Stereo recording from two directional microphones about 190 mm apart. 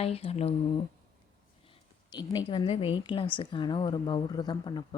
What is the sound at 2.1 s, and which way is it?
Speech, 20° left (ahead or behind).